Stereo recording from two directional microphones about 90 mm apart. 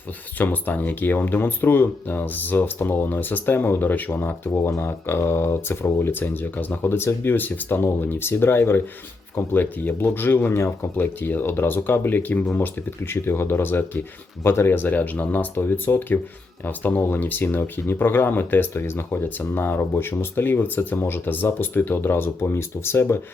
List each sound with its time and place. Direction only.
0.3 s speech: 20° left (ahead or behind)